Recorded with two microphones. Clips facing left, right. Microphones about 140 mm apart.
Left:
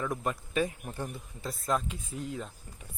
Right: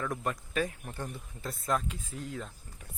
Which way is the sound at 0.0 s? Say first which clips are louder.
Left 1 dB; 10° left (ahead or behind).